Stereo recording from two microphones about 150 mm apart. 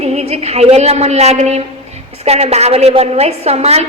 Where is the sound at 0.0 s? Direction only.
45° right (ahead or behind).